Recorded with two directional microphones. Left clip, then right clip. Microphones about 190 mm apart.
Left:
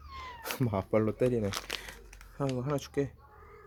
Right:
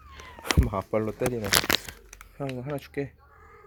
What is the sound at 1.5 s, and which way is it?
Crumpling, 55° right (ahead or behind).